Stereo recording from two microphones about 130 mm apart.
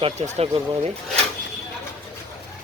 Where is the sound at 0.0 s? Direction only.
55° right (ahead or behind).